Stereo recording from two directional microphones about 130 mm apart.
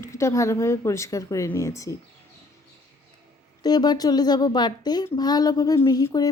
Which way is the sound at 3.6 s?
30° left (ahead or behind).